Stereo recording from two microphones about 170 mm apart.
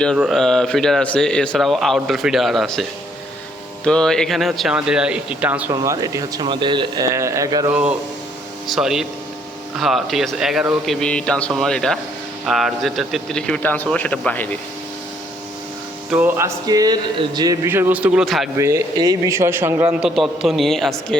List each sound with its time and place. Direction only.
0.2 s speech: centre (ahead or behind)
3.8 s speech: 5° left (ahead or behind); by 7.7 s 20° right (ahead or behind)
7.7 s a man's voice: 5° right (ahead or behind); by 14.6 s 10° left (ahead or behind)
16.0 s speech: 10° right (ahead or behind)
16.6 s speech: 20° right (ahead or behind); by 18.4 s 5° right (ahead or behind)
18.5 s speech: 20° right (ahead or behind); by 21.2 s centre (ahead or behind)